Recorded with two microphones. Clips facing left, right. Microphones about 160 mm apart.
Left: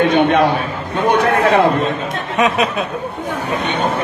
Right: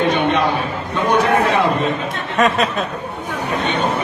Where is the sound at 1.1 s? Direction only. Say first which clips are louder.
Left 2 dB; 55° left (ahead or behind).